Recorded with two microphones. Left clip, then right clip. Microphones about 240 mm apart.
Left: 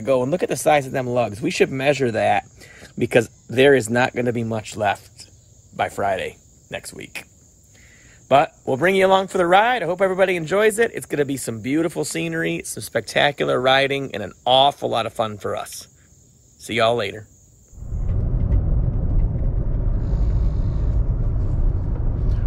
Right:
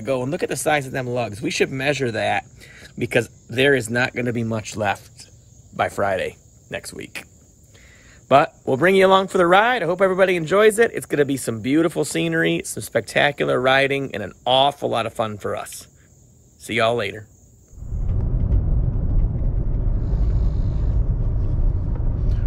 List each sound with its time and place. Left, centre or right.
0.0 s speech: left; by 7.2 s centre
8.3 s speech: centre
18.0 s music: centre
19.1 s vehicle: centre